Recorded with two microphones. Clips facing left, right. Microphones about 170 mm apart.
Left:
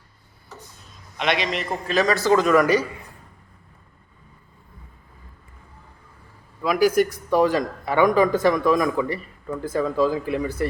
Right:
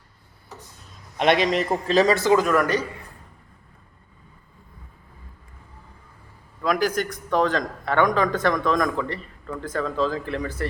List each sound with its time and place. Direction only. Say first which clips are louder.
1.1 s a man's voice: right 5 dB; 45° right (ahead or behind)
1.7 s speech: right 1 dB; 30° right (ahead or behind)
2.3 s speech: left 2 dB; 5° right (ahead or behind)
6.6 s a man's voice: left 4 dB; 10° left (ahead or behind)